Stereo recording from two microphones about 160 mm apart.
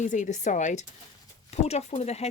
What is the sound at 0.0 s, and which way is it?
Speech, 50° left (ahead or behind).